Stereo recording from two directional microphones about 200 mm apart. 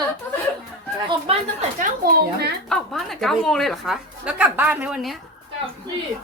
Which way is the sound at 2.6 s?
5° left (ahead or behind).